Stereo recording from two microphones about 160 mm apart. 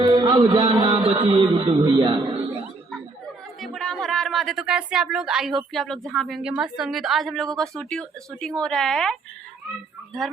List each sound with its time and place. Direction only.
0.0 s music: 25° right (ahead or behind)
3.6 s a woman's voice: 5° left (ahead or behind)